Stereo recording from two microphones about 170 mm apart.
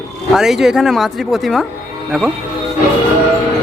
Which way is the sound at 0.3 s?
Centre (ahead or behind).